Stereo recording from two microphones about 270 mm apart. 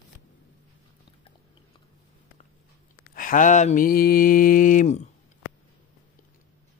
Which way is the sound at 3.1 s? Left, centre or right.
Left.